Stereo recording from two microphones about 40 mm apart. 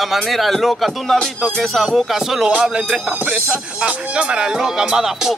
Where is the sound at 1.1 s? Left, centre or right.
Centre.